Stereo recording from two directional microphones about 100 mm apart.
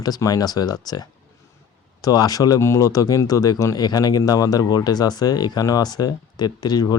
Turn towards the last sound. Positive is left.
turn(degrees=45)  # may be behind; listen again after turning